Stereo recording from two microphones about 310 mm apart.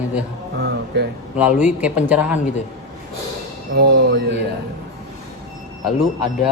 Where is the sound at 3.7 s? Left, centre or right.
Right.